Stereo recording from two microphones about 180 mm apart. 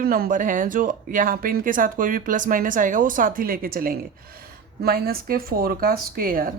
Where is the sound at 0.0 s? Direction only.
55° right (ahead or behind).